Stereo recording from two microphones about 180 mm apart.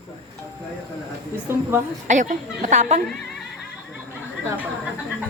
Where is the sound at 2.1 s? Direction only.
45° right (ahead or behind).